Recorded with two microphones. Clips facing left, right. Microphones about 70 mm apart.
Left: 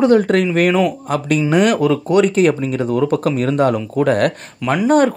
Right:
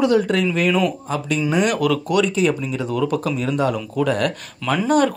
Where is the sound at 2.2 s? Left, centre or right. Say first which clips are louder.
Left 5 dB; left.